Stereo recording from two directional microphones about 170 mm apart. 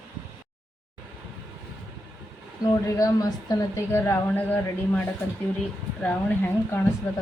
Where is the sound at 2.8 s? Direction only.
20° left (ahead or behind).